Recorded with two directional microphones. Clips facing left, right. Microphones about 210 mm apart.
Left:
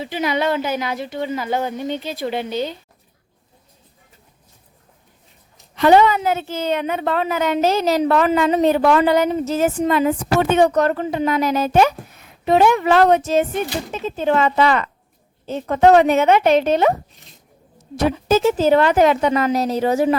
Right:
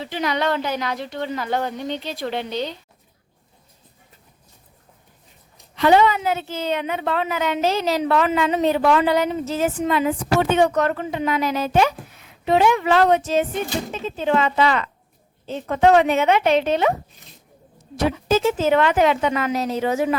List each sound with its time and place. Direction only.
0.0 s speech: 10° left (ahead or behind)
5.7 s a woman's voice: 45° left (ahead or behind)
17.9 s a woman's voice: 45° left (ahead or behind)